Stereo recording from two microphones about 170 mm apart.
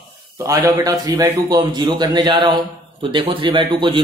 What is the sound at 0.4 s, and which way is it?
A man's voice, 20° right (ahead or behind).